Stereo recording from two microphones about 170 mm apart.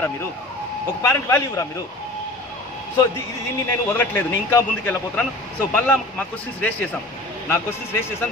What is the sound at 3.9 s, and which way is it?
A man's voice, 15° left (ahead or behind).